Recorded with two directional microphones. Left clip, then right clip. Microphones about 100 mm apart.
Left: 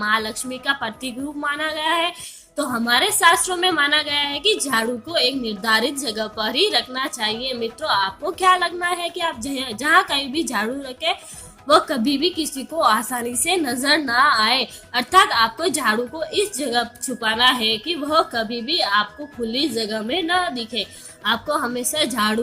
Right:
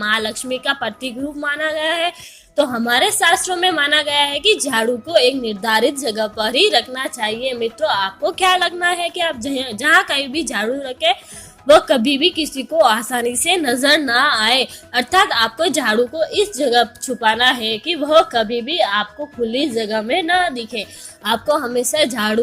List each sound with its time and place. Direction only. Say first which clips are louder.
0.0 s a woman's voice: right 2 dB; 45° right (ahead or behind)
2.6 s a woman's voice: right 4 dB; 35° right (ahead or behind)
21.2 s a woman's voice: right 4 dB; 50° right (ahead or behind)